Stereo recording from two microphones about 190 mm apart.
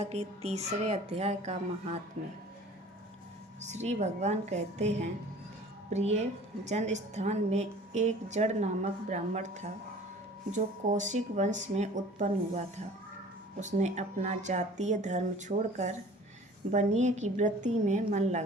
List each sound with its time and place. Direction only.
0.0 s a woman's voice: 35° right (ahead or behind)
3.6 s a woman's voice: 35° right (ahead or behind)